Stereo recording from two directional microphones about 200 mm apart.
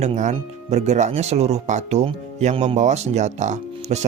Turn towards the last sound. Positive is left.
turn(degrees=-35)  # may be behind; listen again after turning